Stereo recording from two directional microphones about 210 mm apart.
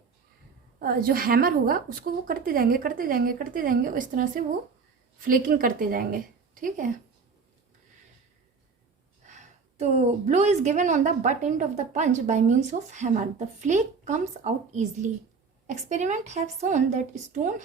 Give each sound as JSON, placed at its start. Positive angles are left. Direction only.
{"t": 0.8, "sound": "a woman's voice", "side_deg": -45}
{"t": 9.2, "sound": "a woman's voice", "side_deg": -35}